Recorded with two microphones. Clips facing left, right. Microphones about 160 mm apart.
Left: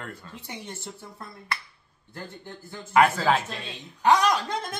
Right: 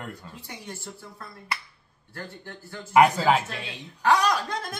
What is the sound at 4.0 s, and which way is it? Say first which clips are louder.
Speech: left 1 dB; 20° left (ahead or behind).